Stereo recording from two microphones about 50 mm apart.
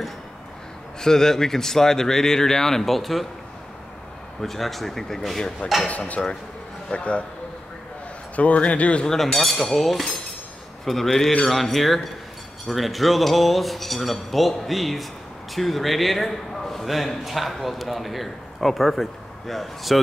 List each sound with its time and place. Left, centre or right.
1.0 s speech: centre
4.4 s a man's voice: centre
5.9 s speech: left
8.4 s speech: left
9.0 s a man's voice: centre